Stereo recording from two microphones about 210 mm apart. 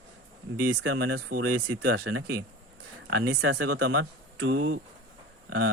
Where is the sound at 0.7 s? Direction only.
90° right.